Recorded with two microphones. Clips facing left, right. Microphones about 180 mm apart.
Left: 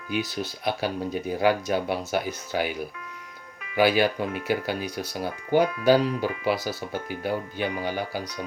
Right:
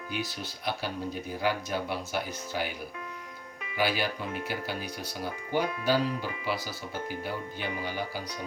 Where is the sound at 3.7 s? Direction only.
65° left (ahead or behind).